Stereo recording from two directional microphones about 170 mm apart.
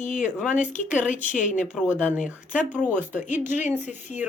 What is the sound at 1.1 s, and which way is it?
Speech, 45° left (ahead or behind).